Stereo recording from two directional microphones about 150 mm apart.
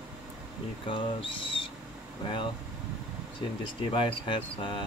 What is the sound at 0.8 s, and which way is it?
Speech, 35° left (ahead or behind).